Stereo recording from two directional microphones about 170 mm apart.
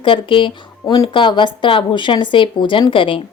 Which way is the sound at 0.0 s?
30° left (ahead or behind).